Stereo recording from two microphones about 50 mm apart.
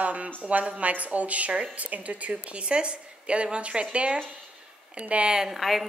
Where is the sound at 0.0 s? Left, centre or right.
Right.